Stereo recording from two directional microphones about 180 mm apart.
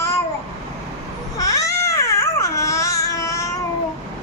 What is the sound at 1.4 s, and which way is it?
Babbling, 20° left (ahead or behind).